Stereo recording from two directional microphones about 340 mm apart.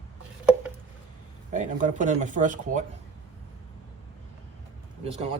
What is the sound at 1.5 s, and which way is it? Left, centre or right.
Speech, right.